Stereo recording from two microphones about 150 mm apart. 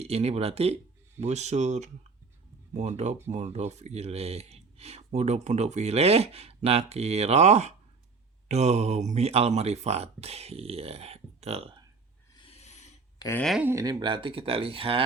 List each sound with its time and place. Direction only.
0.0 s speech: 45° right (ahead or behind)
12.5 s a sound: 45° left (ahead or behind)
13.3 s speech: 5° left (ahead or behind)
13.6 s speech: 15° right (ahead or behind); by 15.0 s 35° right (ahead or behind)